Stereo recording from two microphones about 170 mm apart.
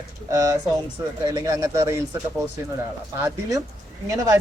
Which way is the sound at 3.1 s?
15° right (ahead or behind).